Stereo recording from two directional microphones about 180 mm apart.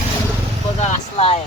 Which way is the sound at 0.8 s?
35° left (ahead or behind).